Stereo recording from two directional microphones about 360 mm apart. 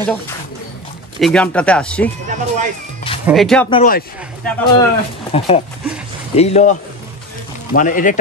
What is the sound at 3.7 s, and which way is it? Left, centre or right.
Speech, left.